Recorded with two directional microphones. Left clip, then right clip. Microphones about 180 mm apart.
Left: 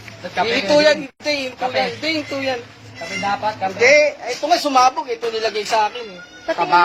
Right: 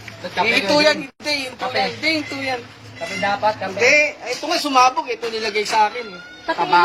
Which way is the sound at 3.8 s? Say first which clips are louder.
Left 3 dB; 45° left (ahead or behind).